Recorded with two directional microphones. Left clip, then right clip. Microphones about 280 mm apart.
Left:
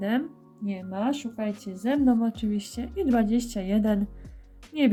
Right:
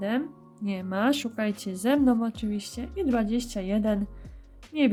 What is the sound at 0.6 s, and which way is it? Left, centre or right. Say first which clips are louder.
A woman's voice: right 3 dB; right.